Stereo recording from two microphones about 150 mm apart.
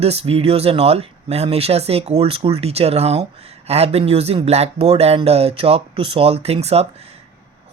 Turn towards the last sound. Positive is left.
turn(degrees=-45)  # may be behind; listen again after turning